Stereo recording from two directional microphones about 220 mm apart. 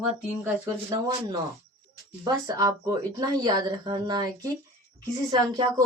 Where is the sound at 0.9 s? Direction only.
15° right (ahead or behind).